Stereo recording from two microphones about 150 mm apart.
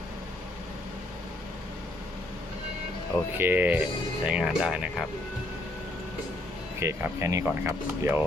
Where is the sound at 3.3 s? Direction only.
15° right (ahead or behind).